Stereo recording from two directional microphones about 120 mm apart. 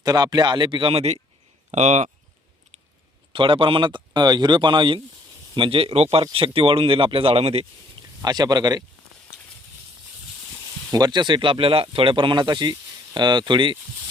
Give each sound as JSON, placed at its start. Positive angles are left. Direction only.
{"t": 0.0, "sound": "speech", "side_deg": -35}
{"t": 1.7, "sound": "speech", "side_deg": -75}
{"t": 3.3, "sound": "speech", "side_deg": -50}
{"t": 8.2, "sound": "speech", "side_deg": -35}
{"t": 10.9, "sound": "speech", "side_deg": -35}